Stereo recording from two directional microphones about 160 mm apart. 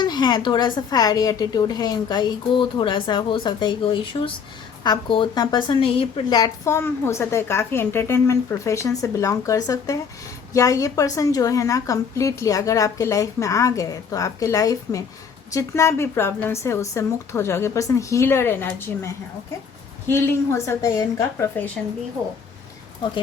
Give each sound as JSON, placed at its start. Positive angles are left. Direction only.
{"t": 0.0, "sound": "a woman's voice", "side_deg": 25}